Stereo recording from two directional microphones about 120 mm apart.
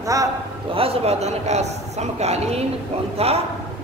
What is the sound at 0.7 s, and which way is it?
A man's voice, 55° right (ahead or behind).